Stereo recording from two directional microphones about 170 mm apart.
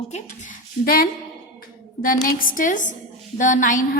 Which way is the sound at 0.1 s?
45° left (ahead or behind).